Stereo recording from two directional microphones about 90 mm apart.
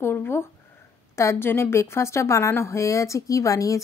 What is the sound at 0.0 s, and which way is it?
A woman's voice, 25° left (ahead or behind).